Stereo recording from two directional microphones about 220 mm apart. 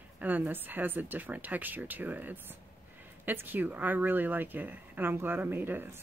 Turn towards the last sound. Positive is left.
turn(degrees=-10)  # may be behind; listen again after turning